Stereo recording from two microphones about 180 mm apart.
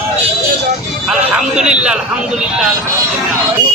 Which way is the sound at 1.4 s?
5° right (ahead or behind).